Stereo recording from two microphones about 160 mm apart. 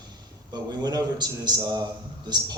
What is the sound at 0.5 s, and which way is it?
A man's voice, 25° right (ahead or behind).